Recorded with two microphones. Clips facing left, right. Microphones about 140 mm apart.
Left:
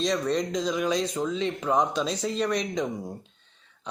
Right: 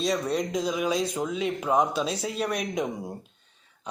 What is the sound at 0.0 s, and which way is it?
Speech, 10° right (ahead or behind).